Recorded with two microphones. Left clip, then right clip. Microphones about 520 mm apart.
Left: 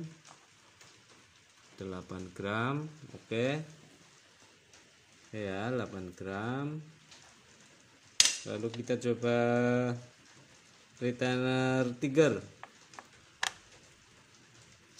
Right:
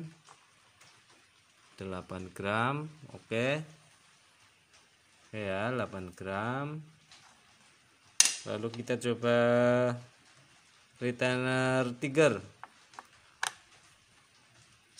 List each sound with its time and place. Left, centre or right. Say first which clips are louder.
1.8 s speech: right 2 dB; left
5.3 s speech: right 2 dB; left
8.5 s speech: even; left
11.0 s speech: right 1 dB; left